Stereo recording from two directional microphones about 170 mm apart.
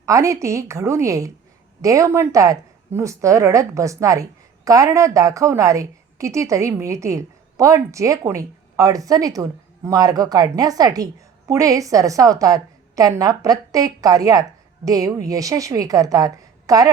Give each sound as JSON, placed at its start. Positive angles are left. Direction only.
{"t": 0.0, "sound": "a woman's voice", "side_deg": -20}